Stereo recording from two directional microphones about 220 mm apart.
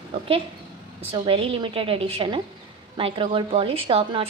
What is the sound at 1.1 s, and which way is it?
A woman's voice, 25° right (ahead or behind).